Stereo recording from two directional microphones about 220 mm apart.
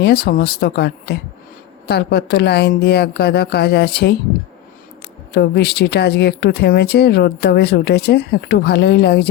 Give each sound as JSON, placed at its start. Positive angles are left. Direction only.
{"t": 0.0, "sound": "speech", "side_deg": 45}
{"t": 5.3, "sound": "speech", "side_deg": 50}